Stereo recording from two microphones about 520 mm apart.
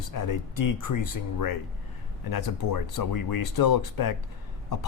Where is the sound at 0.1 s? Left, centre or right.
Left.